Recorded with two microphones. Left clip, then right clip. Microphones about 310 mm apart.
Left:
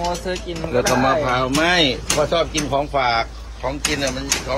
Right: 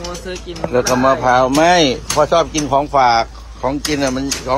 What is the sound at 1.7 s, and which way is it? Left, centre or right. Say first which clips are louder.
Speech: right 4 dB; centre.